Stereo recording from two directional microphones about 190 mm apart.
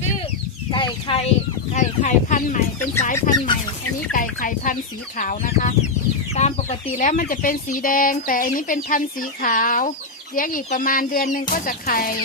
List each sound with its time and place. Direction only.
0.7 s speech: 25° left (ahead or behind); by 12.1 s 50° left (ahead or behind)